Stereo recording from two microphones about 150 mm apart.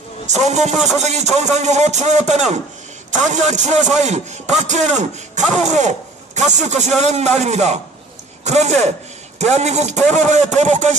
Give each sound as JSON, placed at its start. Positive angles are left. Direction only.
{"t": 0.3, "sound": "a man's voice", "side_deg": -50}